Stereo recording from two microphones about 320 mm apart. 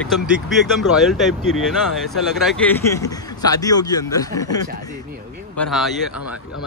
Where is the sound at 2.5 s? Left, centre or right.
Centre.